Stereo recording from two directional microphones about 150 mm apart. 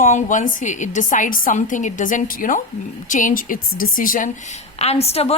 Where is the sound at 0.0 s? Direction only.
55° left (ahead or behind).